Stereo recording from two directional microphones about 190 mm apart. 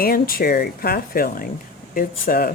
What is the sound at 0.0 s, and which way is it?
Speech, 50° left (ahead or behind).